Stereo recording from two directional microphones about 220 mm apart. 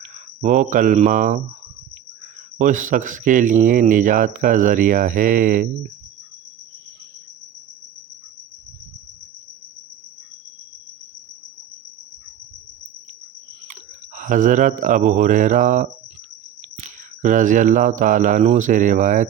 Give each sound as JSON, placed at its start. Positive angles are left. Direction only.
{"t": 0.0, "sound": "speech", "side_deg": -35}
{"t": 2.6, "sound": "speech", "side_deg": -35}
{"t": 14.2, "sound": "speech", "side_deg": -35}
{"t": 16.6, "sound": "mantra", "side_deg": -35}